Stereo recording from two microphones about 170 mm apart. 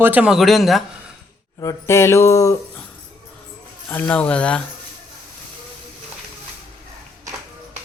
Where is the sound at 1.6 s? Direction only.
15° left (ahead or behind).